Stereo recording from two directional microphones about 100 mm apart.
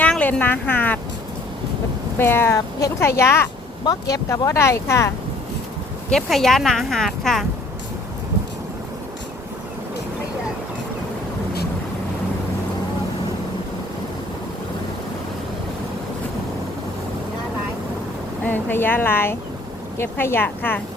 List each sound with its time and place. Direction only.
0.0 s a sound: 15° left (ahead or behind)
2.1 s speech: 25° left (ahead or behind)
3.8 s speech: 35° left (ahead or behind)
6.1 s speech: centre (ahead or behind)
18.4 s speech: 20° left (ahead or behind)